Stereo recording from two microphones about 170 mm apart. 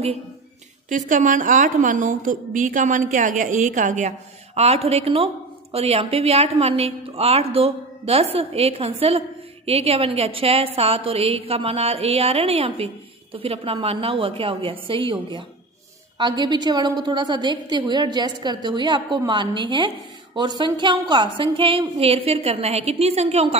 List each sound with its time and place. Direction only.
0.8 s a woman's voice: 50° right (ahead or behind)